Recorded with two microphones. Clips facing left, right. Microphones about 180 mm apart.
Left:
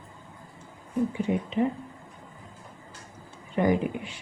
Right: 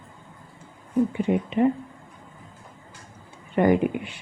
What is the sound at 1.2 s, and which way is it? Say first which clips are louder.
Speech: right 4 dB; 60° right (ahead or behind).